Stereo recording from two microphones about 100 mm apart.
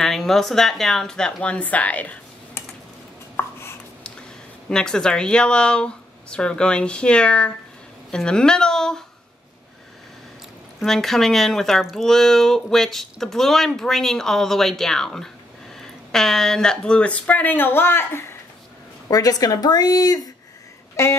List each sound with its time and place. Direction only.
0.0 s speech: 5° left (ahead or behind)
3.3 s a sound: 25° left (ahead or behind)
4.6 s speech: 5° left (ahead or behind)
10.8 s speech: centre (ahead or behind); by 18.2 s 25° left (ahead or behind)
19.0 s speech: 40° left (ahead or behind)
20.9 s speech: 30° left (ahead or behind)